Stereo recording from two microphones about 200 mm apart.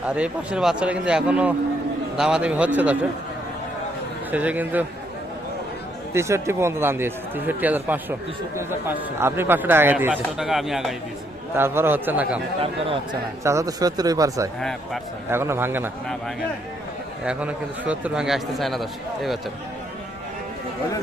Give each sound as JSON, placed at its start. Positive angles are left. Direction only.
{"t": 0.0, "sound": "a man's voice", "side_deg": -5}
{"t": 4.3, "sound": "speech", "side_deg": -10}
{"t": 6.1, "sound": "speech", "side_deg": -15}
{"t": 11.5, "sound": "speech", "side_deg": -10}
{"t": 12.5, "sound": "speech", "side_deg": -30}
{"t": 13.4, "sound": "speech", "side_deg": -15}
{"t": 17.2, "sound": "a man's voice", "side_deg": -5}